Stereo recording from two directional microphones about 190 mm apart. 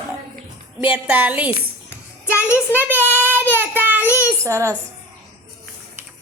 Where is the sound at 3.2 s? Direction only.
10° right (ahead or behind).